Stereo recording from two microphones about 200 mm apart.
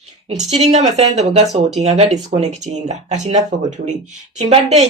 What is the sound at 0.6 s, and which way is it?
Speech, 35° right (ahead or behind).